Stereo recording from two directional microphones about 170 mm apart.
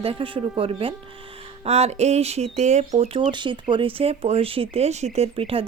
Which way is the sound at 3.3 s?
30° right (ahead or behind).